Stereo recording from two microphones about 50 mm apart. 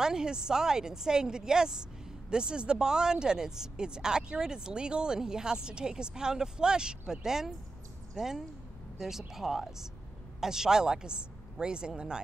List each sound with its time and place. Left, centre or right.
0.0 s speech: centre